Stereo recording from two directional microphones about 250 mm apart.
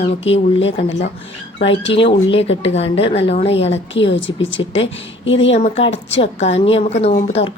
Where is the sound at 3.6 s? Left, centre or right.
Left.